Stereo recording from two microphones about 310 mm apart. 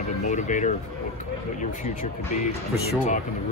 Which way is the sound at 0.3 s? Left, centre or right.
Left.